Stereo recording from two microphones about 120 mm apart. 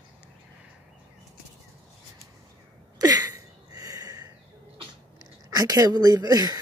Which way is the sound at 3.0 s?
30° right (ahead or behind).